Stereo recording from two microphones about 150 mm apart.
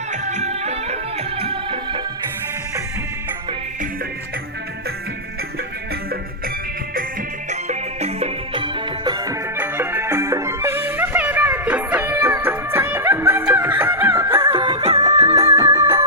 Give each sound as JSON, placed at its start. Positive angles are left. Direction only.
{"t": 0.1, "sound": "music", "side_deg": -50}
{"t": 7.5, "sound": "music", "side_deg": -45}
{"t": 9.6, "sound": "music", "side_deg": -15}
{"t": 14.6, "sound": "music", "side_deg": -30}